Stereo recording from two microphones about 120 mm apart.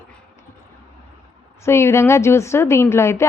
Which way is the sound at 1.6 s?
20° left (ahead or behind).